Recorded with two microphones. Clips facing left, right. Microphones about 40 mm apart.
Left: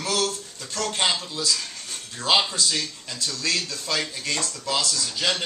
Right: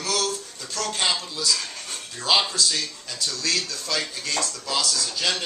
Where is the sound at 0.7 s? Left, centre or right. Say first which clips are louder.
Left 1 dB; centre.